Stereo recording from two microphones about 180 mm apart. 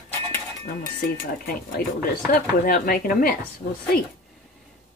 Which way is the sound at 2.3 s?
50° left (ahead or behind).